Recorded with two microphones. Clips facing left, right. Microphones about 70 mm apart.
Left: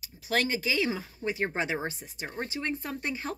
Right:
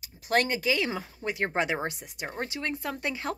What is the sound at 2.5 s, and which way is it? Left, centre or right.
Speech, right.